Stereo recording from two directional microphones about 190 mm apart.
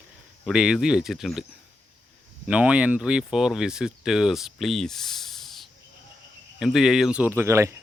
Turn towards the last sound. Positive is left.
turn(degrees=-15)  # may be behind; listen again after turning